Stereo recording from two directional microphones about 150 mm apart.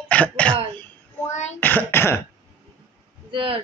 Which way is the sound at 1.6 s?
10° left (ahead or behind).